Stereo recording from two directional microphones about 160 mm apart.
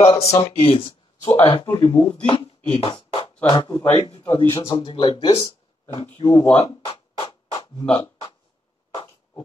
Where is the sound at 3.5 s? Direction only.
25° left (ahead or behind).